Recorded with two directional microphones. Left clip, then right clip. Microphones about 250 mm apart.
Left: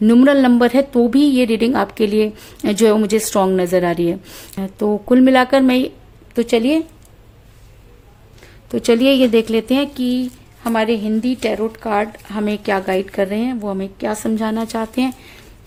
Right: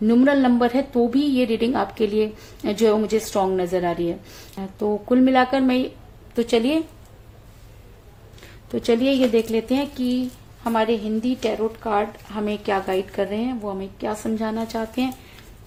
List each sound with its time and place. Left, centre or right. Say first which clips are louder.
0.0 s a woman's voice: left 6 dB; left
8.7 s speech: left 6 dB; left